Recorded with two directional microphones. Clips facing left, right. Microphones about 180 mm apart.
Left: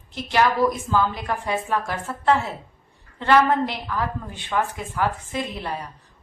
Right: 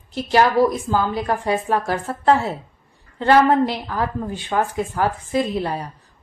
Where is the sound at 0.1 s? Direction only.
35° right (ahead or behind).